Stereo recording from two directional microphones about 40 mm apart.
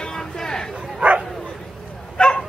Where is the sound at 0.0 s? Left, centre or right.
Centre.